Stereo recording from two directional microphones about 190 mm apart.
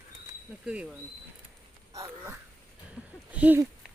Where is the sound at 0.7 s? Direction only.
5° right (ahead or behind).